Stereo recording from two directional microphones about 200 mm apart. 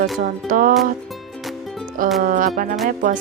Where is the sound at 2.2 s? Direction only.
45° right (ahead or behind).